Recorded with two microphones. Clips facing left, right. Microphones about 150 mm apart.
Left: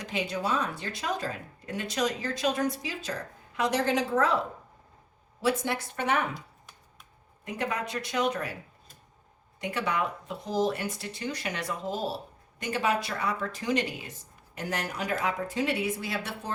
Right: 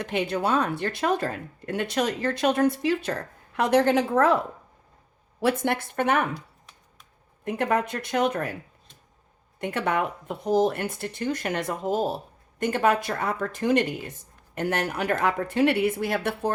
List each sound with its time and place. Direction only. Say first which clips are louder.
0.0 s a woman's voice: right 5 dB; 60° right (ahead or behind)
5.4 s a woman's voice: right 4 dB; 55° right (ahead or behind)
7.4 s speech: right 7 dB; 55° right (ahead or behind)
9.6 s a woman's voice: right 4 dB; 55° right (ahead or behind)